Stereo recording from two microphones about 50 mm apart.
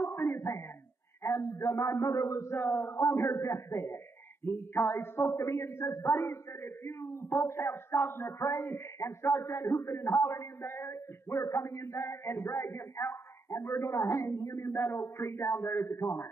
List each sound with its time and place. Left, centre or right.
0.0 s a sound: left
1.2 s a man's voice: left
2.5 s a man's voice: left
4.5 s a man's voice: left
14.7 s a man's voice: left